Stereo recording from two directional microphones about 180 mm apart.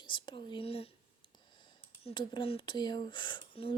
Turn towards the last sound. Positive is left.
turn(degrees=30)  # may be behind; listen again after turning